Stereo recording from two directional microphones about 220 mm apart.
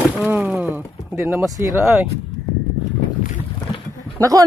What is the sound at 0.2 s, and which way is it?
Speech, 10° right (ahead or behind).